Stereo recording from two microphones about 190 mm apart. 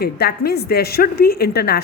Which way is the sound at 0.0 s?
55° left (ahead or behind).